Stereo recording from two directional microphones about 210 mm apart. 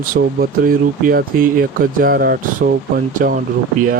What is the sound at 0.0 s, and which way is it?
Speech, 45° right (ahead or behind).